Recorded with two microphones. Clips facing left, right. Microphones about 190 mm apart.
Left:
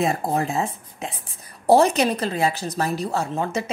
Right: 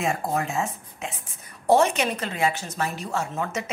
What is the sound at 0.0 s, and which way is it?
A woman's voice, 35° left (ahead or behind).